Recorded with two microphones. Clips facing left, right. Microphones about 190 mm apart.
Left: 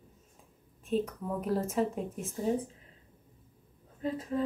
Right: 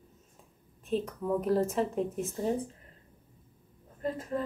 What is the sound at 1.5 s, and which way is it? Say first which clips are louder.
Speech: even; centre (ahead or behind).